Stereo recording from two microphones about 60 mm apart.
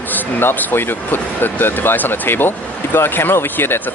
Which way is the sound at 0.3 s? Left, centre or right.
Left.